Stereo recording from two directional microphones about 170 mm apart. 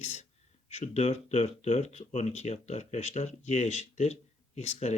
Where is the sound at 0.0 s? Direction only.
40° left (ahead or behind).